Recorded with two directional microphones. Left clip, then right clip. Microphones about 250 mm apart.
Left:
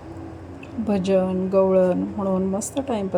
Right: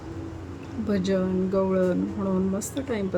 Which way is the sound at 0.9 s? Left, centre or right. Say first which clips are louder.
Left 5 dB; centre.